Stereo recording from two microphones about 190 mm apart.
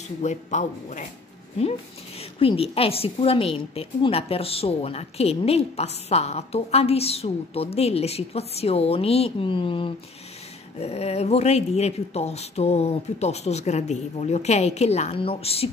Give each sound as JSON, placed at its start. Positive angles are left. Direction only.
{"t": 0.2, "sound": "a woman's voice", "side_deg": 40}
{"t": 2.3, "sound": "a woman's voice", "side_deg": 30}